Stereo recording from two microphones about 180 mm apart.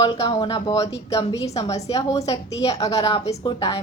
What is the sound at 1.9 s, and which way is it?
A woman's voice, 20° left (ahead or behind).